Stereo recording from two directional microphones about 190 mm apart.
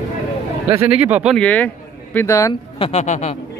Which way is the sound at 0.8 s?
10° right (ahead or behind).